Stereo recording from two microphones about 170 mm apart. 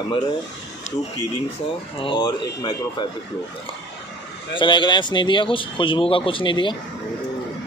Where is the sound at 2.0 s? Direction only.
30° left (ahead or behind).